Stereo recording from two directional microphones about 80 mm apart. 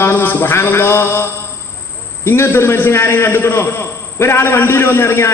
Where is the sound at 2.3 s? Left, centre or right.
Left.